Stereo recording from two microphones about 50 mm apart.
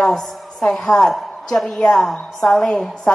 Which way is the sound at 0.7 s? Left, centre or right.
Centre.